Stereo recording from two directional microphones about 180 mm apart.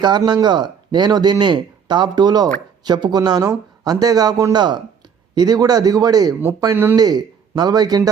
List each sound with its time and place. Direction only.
0.0 s speech: 25° right (ahead or behind)